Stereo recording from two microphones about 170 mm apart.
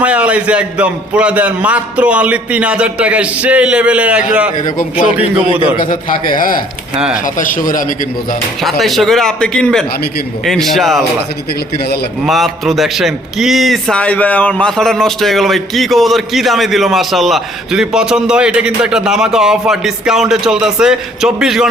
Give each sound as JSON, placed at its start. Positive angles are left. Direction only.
{"t": 0.0, "sound": "a man's voice", "side_deg": -5}
{"t": 4.5, "sound": "a man's voice", "side_deg": 50}
{"t": 6.9, "sound": "a man's voice", "side_deg": -5}
{"t": 7.3, "sound": "speech", "side_deg": 50}
{"t": 8.8, "sound": "a man's voice", "side_deg": 0}
{"t": 12.2, "sound": "a man's voice", "side_deg": 0}